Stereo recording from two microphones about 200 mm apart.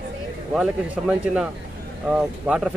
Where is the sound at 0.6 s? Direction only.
5° right (ahead or behind).